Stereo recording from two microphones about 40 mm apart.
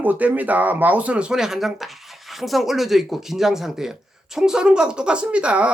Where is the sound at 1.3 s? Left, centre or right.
Centre.